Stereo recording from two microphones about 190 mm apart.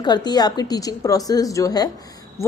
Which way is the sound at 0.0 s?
20° left (ahead or behind).